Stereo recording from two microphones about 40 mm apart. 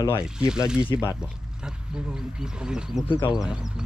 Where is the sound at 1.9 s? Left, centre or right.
Centre.